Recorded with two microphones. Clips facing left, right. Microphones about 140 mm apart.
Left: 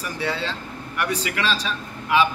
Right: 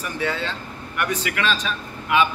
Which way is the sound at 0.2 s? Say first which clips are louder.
Right 1 dB; 30° left (ahead or behind).